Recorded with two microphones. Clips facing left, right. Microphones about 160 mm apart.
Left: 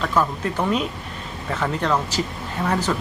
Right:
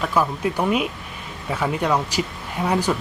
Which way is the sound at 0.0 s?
10° right (ahead or behind).